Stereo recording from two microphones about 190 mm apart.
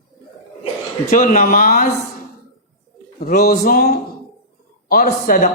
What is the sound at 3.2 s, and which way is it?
A woman's voice, 50° left (ahead or behind).